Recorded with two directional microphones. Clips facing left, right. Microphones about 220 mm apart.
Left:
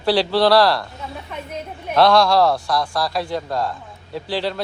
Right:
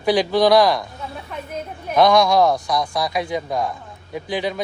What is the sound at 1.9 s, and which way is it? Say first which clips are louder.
Speech: even; 15° right (ahead or behind).